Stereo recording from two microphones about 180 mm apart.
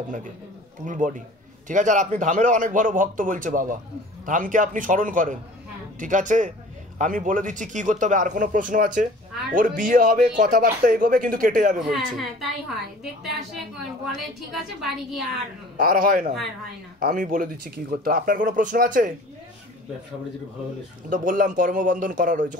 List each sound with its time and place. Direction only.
0.8 s speech: 45° right (ahead or behind)
11.9 s a woman's voice: centre (ahead or behind)
14.5 s a woman's voice: centre (ahead or behind)
15.8 s speech: 55° right (ahead or behind)
21.1 s speech: 45° right (ahead or behind)